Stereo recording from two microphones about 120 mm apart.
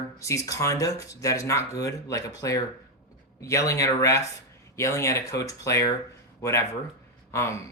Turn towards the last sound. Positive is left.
turn(degrees=25)  # may be behind; listen again after turning